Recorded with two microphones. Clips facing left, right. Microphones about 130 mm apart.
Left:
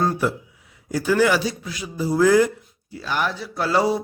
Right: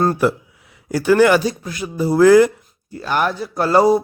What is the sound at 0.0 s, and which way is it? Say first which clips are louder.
A man's voice: right 5 dB; 65° right (ahead or behind).